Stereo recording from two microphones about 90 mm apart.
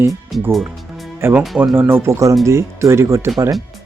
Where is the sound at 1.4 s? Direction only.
5° right (ahead or behind).